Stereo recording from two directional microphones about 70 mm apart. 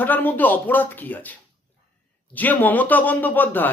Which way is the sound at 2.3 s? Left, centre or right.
Left.